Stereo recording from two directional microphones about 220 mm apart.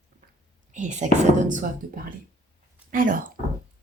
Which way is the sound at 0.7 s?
35° right (ahead or behind).